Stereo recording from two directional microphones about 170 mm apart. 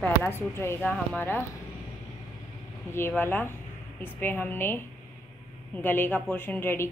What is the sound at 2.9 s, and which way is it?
Speech, 15° left (ahead or behind).